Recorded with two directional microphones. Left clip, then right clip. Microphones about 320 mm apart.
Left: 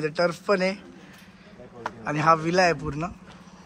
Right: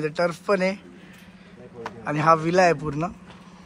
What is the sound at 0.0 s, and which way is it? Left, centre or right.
Speech, centre.